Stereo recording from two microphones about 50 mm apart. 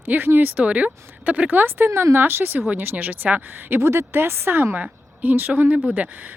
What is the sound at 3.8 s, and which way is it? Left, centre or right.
Speech, right.